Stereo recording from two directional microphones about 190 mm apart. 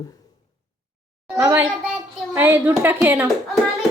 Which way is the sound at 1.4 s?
15° right (ahead or behind).